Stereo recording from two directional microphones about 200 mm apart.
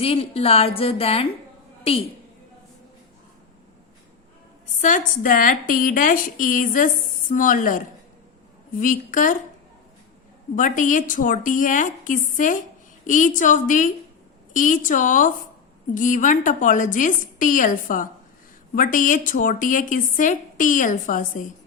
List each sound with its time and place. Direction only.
0.0 s a woman's voice: 30° left (ahead or behind)
4.8 s a woman's voice: 40° left (ahead or behind)
8.8 s a woman's voice: 40° left (ahead or behind)
10.5 s a woman's voice: 40° left (ahead or behind)